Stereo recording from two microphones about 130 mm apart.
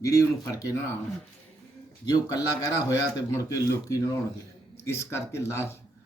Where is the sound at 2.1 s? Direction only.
30° left (ahead or behind).